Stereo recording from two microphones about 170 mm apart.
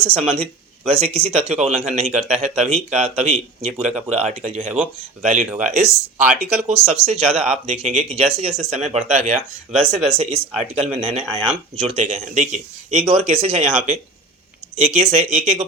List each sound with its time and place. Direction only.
0.0 s speech: 35° right (ahead or behind)